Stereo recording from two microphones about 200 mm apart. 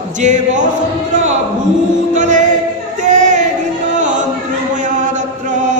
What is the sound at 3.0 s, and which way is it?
Child singing, 35° right (ahead or behind).